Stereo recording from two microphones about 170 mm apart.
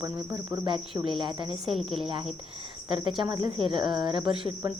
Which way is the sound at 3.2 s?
25° right (ahead or behind).